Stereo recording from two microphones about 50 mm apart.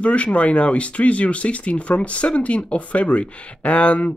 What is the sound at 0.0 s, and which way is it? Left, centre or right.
Speech, left.